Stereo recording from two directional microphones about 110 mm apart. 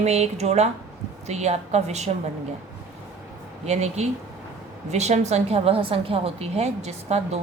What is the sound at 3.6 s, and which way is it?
A woman's voice, 85° right.